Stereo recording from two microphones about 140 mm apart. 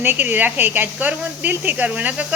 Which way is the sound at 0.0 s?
15° right (ahead or behind).